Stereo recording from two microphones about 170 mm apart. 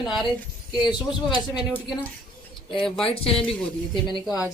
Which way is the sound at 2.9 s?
5° left (ahead or behind).